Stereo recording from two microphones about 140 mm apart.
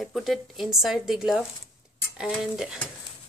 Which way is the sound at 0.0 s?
Centre (ahead or behind).